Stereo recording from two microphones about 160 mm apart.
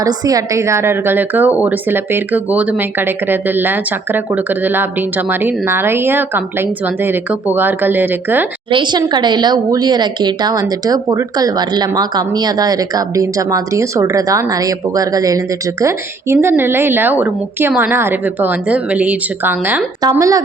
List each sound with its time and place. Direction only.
0.0 s speech: 20° right (ahead or behind)
8.7 s speech: 30° right (ahead or behind); by 19.8 s 10° right (ahead or behind)
20.0 s speech: 20° right (ahead or behind)